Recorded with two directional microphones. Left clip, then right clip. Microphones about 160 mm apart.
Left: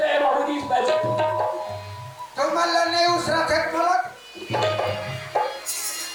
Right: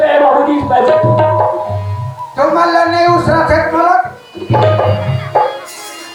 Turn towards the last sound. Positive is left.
turn(degrees=-10)  # may be behind; listen again after turning